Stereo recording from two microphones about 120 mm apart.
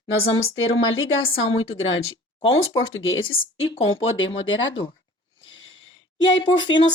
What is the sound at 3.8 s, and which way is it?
Speech, 50° left (ahead or behind).